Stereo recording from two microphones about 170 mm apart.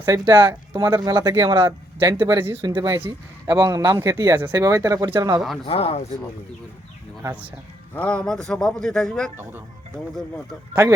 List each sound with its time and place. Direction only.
0.0 s speech: 15° right (ahead or behind)
5.6 s speech: 35° left (ahead or behind)
7.2 s speech: 10° right (ahead or behind)
7.9 s speech: 5° left (ahead or behind)